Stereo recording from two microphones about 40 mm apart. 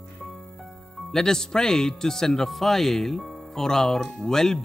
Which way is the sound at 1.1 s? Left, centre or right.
Centre.